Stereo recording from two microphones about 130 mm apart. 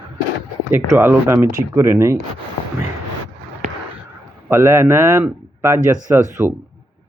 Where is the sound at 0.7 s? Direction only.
15° right (ahead or behind).